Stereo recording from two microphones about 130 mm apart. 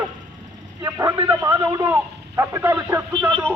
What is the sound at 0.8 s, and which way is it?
Vehicle, 25° right (ahead or behind).